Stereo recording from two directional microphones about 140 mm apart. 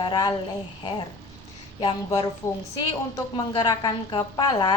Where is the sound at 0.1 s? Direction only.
30° left (ahead or behind).